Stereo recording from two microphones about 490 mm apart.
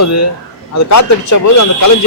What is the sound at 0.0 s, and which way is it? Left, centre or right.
A man's voice, left.